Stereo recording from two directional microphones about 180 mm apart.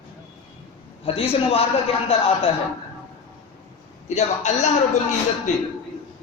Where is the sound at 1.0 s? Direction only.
30° left (ahead or behind).